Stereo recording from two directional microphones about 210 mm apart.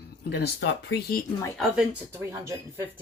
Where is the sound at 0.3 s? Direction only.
55° left (ahead or behind).